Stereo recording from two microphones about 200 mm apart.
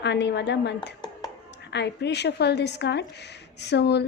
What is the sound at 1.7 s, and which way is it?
A woman's voice, 60° left (ahead or behind).